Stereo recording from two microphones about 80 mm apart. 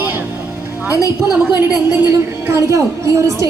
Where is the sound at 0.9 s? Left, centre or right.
Left.